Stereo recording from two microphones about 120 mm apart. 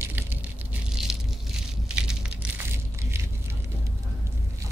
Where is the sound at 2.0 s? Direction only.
5° right (ahead or behind).